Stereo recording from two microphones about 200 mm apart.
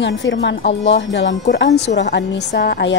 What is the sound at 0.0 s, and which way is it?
Speech, 60° left (ahead or behind).